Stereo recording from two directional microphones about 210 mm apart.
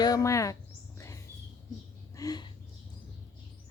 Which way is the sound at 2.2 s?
20° left (ahead or behind).